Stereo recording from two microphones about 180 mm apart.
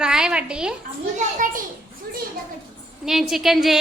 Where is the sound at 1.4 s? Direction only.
50° right (ahead or behind).